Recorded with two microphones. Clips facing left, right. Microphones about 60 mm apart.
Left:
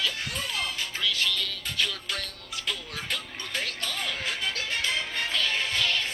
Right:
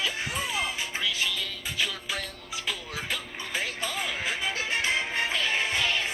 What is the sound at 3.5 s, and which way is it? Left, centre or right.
Music, centre.